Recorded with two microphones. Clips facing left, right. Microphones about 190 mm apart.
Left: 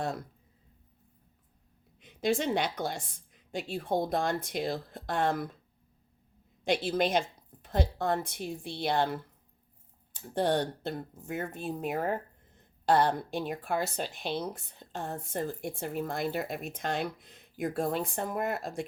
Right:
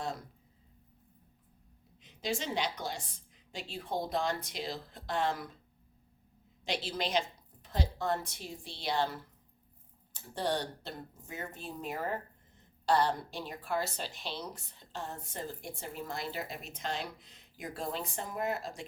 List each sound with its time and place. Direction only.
2.0 s speech: 55° left (ahead or behind)
6.7 s a woman's voice: 50° left (ahead or behind)